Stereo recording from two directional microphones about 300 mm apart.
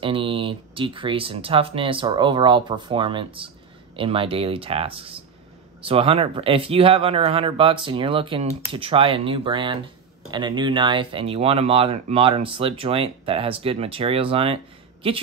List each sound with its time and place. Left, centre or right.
0.0 s speech: centre